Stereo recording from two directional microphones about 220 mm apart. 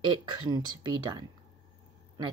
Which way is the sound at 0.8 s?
20° right (ahead or behind).